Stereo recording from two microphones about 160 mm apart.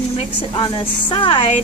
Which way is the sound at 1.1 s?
30° left (ahead or behind).